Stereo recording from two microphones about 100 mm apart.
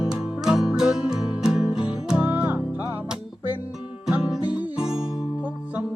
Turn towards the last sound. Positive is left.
turn(degrees=-5)  # may be behind; listen again after turning